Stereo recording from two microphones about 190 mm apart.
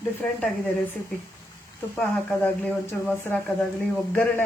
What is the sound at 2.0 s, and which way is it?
Speech, 10° left (ahead or behind).